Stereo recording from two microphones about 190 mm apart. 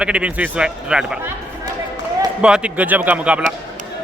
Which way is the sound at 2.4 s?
5° right (ahead or behind).